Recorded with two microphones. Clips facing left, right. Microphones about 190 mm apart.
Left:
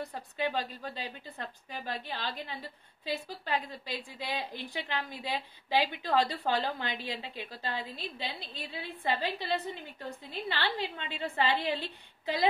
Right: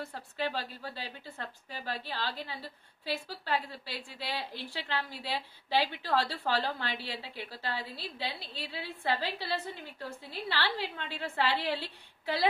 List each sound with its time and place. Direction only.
0.0 s a woman's voice: 15° left (ahead or behind)